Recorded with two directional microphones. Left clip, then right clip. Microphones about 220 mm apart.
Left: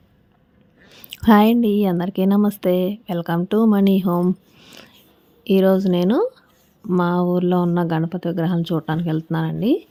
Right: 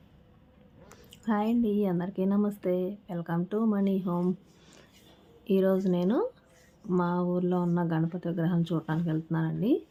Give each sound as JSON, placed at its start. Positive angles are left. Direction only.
{"t": 0.9, "sound": "speech", "side_deg": 40}